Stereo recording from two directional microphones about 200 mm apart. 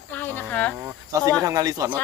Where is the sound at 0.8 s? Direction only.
10° right (ahead or behind).